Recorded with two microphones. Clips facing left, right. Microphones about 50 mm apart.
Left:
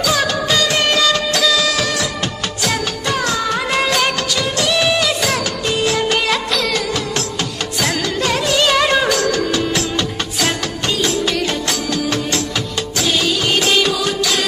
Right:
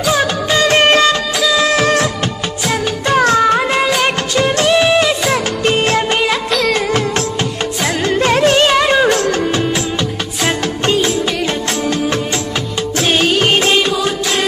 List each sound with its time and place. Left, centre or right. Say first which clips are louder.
0.0 s music: right 2 dB; right
1.5 s music of bollywood: right 5 dB; right
3.1 s music: right 8 dB; right
5.7 s music of bollywood: right 4 dB; right
8.2 s music: right 6 dB; right
8.7 s music: right 3 dB; centre
10.4 s music: right 4 dB; right
13.0 s music: right 5 dB; right